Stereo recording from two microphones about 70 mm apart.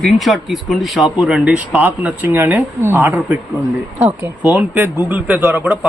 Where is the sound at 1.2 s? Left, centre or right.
Centre.